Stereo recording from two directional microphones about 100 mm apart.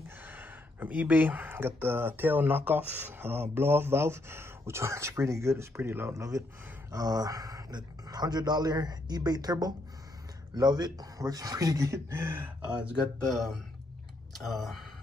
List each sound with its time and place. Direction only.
0.2 s speech: 20° right (ahead or behind)
12.6 s speech: 10° right (ahead or behind)